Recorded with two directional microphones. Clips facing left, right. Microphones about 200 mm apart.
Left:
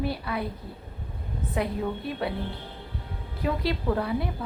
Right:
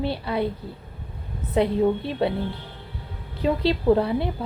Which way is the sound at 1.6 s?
25° right (ahead or behind).